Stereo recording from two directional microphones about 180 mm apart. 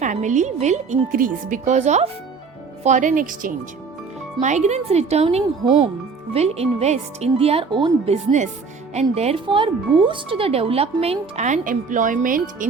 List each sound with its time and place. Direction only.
0.0 s speech: 45° right (ahead or behind)